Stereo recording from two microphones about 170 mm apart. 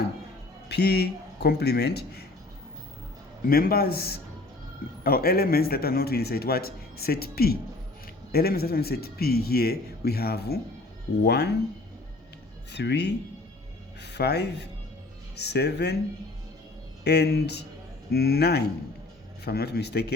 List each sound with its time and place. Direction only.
0.7 s a man's voice: 70° left (ahead or behind)
3.4 s a man's voice: 60° left (ahead or behind); by 11.5 s 75° left (ahead or behind)
12.7 s a man's voice: 85° left
17.0 s a man's voice: 75° left (ahead or behind)